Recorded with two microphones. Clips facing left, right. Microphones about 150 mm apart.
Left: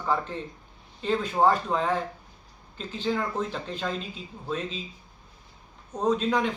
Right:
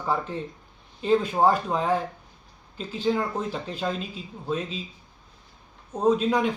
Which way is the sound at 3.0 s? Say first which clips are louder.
Right 2 dB; 10° right (ahead or behind).